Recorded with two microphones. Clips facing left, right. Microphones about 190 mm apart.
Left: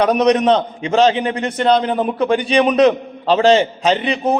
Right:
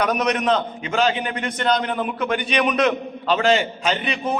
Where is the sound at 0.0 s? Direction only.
35° left (ahead or behind).